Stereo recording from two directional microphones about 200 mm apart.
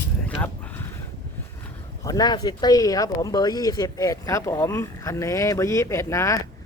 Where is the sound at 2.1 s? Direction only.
20° left (ahead or behind).